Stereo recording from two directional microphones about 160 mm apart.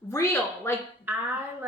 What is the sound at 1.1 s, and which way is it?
Speech, 10° right (ahead or behind).